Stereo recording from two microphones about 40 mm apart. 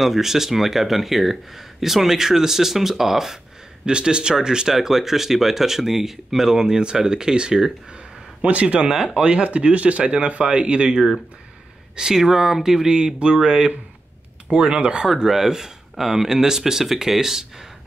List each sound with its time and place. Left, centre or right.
0.0 s speech: centre
3.8 s speech: right
8.4 s speech: right
8.8 s speech: centre
9.2 s speech: right
11.9 s speech: centre
15.2 s speech: centre